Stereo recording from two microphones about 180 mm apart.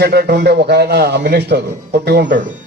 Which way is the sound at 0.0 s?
65° right (ahead or behind).